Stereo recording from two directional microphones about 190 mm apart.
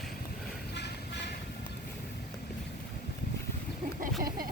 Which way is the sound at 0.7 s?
65° left (ahead or behind).